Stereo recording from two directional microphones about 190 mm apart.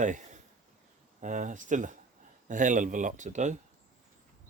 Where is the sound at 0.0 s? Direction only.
40° right (ahead or behind).